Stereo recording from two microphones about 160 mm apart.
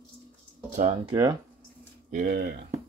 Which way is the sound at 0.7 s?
45° right (ahead or behind).